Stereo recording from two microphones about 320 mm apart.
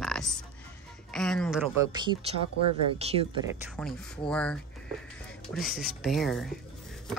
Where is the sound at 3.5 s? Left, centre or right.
Centre.